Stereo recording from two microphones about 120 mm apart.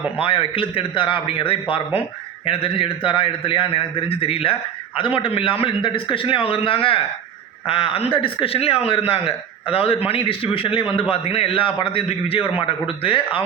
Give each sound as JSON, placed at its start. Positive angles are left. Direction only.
{"t": 0.2, "sound": "a man's voice", "side_deg": 50}